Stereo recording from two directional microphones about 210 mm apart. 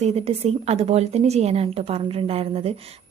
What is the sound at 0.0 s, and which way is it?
Speech, 30° right (ahead or behind).